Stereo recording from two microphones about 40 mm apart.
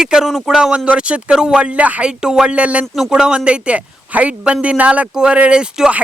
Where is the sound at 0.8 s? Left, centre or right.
Right.